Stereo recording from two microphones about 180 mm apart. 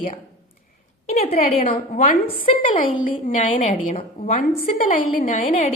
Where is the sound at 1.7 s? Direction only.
45° left (ahead or behind).